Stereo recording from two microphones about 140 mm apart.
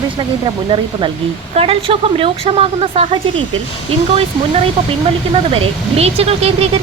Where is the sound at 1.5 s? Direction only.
45° right (ahead or behind).